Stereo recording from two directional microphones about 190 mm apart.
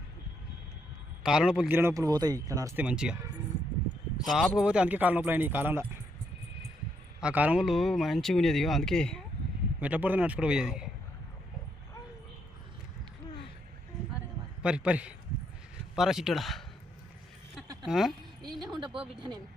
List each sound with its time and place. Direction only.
1.2 s speech: 5° right (ahead or behind)
2.8 s speech: 5° right (ahead or behind)
4.4 s speech: 5° right (ahead or behind)
7.2 s speech: 5° right (ahead or behind)
9.8 s speech: 10° right (ahead or behind)
14.6 s a man's voice: 5° right (ahead or behind)
17.8 s speech: centre (ahead or behind)
18.8 s speech: 25° right (ahead or behind)